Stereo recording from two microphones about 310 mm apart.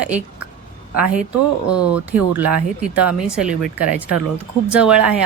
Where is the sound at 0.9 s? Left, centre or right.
Right.